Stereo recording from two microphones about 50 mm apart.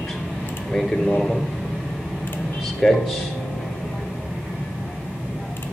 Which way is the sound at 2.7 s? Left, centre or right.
Centre.